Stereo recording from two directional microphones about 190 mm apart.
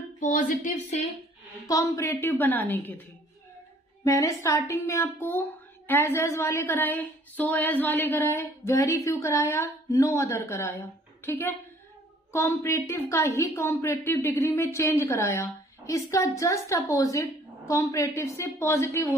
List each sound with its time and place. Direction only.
0.2 s speech: 45° left (ahead or behind)
1.7 s a woman's voice: 20° left (ahead or behind)
4.0 s a woman's voice: 15° left (ahead or behind)